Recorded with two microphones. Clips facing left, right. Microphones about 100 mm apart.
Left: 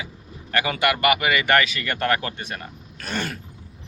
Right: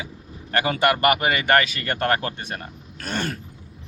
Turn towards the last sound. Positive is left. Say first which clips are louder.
# right 1 dB
turn(degrees=-40)  # may be behind; listen again after turning